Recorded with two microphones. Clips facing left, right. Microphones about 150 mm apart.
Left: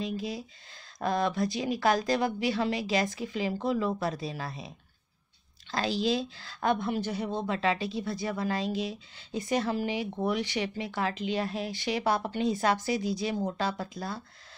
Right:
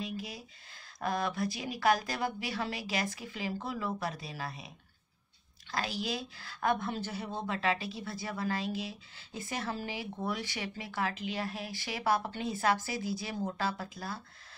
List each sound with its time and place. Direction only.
0.0 s speech: 25° left (ahead or behind)